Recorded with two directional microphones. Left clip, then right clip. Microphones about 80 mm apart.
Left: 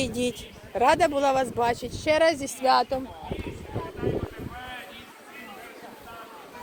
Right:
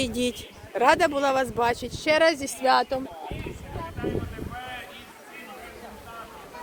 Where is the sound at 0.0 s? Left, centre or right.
Right.